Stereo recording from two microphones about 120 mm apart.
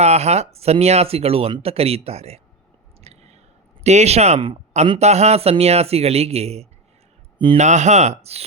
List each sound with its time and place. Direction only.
0.0 s speech: 65° right (ahead or behind)
3.0 s a sound: 65° right (ahead or behind)
3.8 s speech: 65° right (ahead or behind)
7.3 s a man's voice: 45° right (ahead or behind)
7.6 s speech: 75° right (ahead or behind); by 8.4 s 60° right (ahead or behind)